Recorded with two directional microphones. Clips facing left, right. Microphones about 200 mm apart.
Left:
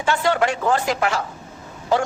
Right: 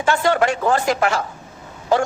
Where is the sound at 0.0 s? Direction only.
45° right (ahead or behind).